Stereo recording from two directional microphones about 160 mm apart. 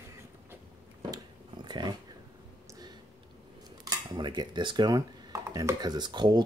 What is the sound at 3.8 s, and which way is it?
Dishes, 25° right (ahead or behind).